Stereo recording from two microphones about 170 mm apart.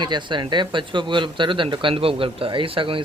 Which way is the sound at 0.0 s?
25° right (ahead or behind).